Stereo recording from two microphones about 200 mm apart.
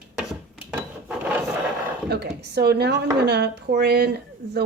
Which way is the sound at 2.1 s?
55° right (ahead or behind).